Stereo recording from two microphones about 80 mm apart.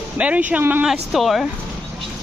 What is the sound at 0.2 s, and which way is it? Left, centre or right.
Speech, centre.